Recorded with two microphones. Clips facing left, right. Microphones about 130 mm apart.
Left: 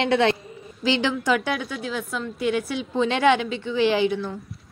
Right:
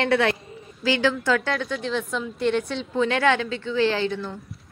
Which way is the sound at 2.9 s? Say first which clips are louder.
Left 2 dB; 20° left (ahead or behind).